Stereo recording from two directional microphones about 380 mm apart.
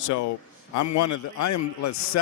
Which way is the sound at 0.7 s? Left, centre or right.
Left.